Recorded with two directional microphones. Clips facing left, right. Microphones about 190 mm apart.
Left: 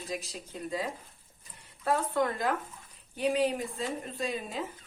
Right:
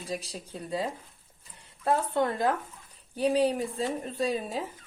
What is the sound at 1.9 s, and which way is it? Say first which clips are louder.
Speech: right 2 dB; 30° right (ahead or behind).